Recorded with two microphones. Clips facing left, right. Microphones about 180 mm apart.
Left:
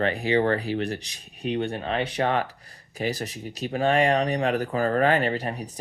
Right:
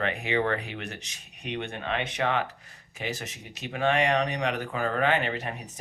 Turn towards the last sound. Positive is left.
turn(degrees=35)  # may be behind; listen again after turning